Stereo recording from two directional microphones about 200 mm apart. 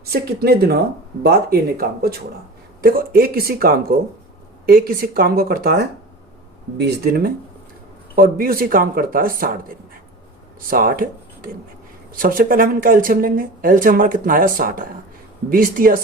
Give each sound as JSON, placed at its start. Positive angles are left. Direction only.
{"t": 0.0, "sound": "speech", "side_deg": -50}